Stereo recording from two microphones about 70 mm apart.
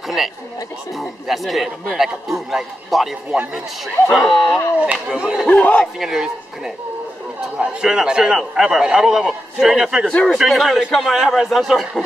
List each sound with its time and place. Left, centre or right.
0.2 s speech: centre
4.5 s speech: left
5.1 s a man's voice: centre
5.5 s speech: centre
5.9 s a man's voice: centre
10.0 s speech: centre